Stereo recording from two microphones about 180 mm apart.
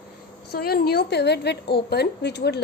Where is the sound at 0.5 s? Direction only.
60° left (ahead or behind).